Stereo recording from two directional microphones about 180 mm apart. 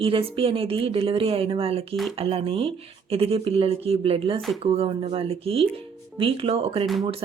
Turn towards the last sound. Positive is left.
turn(degrees=-30)  # may be behind; listen again after turning